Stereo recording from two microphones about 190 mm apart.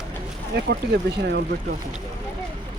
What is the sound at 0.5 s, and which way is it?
Speech, 60° right (ahead or behind).